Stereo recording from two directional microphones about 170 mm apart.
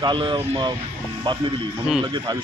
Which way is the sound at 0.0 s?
30° right (ahead or behind).